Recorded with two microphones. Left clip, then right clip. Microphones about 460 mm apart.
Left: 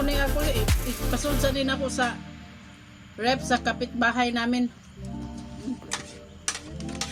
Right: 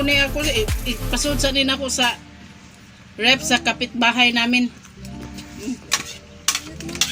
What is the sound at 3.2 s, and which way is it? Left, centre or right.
A woman's voice, left.